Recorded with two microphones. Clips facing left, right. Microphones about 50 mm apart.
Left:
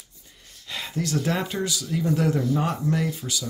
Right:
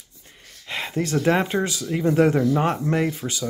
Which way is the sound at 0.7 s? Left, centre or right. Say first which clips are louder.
Right 3 dB; right.